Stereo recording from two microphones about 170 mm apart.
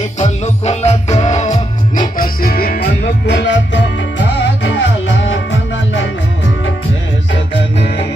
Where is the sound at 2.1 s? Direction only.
60° left (ahead or behind); by 6.7 s 90° left.